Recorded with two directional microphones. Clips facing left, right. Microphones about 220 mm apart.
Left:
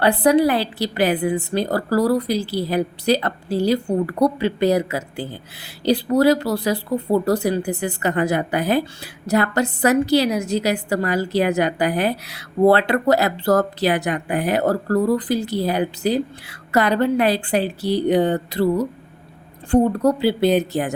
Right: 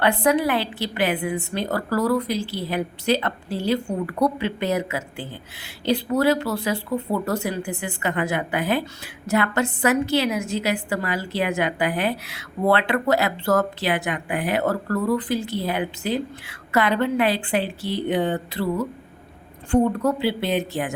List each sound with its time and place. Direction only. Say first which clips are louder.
0.0 s a woman's voice: left 4 dB; 35° left (ahead or behind)